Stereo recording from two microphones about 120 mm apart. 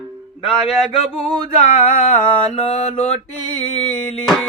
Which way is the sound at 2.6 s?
65° left (ahead or behind).